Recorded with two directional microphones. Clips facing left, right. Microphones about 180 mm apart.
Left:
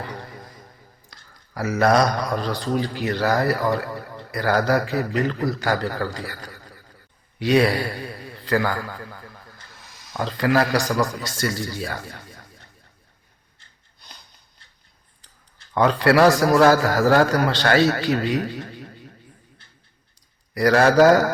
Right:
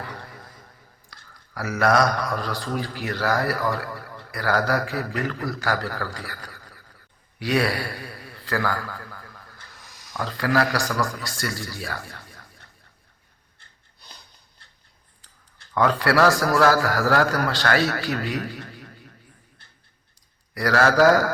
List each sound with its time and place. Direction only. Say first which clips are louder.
0.0 s a sound: left 3 dB; 20° left (ahead or behind)
1.5 s a man's voice: left 2 dB; 25° left (ahead or behind)
15.7 s a man's voice: left 3 dB; 20° left (ahead or behind)
20.5 s a man's voice: left 4 dB; 25° left (ahead or behind)